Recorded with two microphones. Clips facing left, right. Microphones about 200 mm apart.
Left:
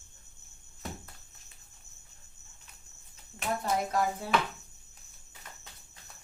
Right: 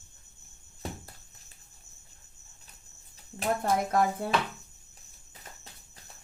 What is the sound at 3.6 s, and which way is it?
Speech, 55° right (ahead or behind).